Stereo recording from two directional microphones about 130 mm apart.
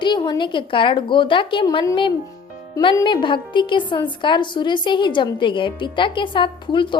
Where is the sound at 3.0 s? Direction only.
40° left (ahead or behind).